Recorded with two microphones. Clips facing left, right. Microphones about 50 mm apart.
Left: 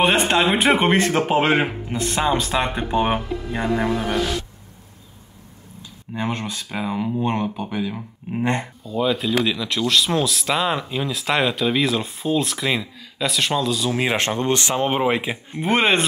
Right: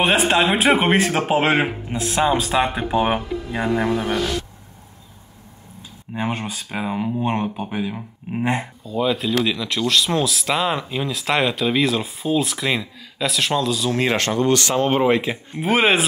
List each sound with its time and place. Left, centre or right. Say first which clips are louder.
0.0 s speech: even; centre
6.1 s speech: right 1 dB; centre
14.1 s speech: right 2 dB; left
15.6 s speech: right 1 dB; centre